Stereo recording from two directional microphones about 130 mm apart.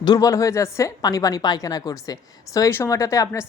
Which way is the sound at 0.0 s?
30° left (ahead or behind).